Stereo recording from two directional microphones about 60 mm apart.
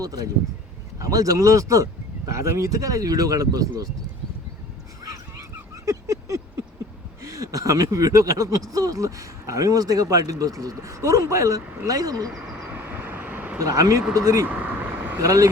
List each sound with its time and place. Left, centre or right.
0.0 s speech: right
0.9 s speech: right
5.0 s a sound: right
7.2 s speech: right
11.9 s speech: right
12.6 s vehicle: right
13.6 s speech: right
14.1 s speech: right
14.4 s vehicle: right
15.2 s speech: right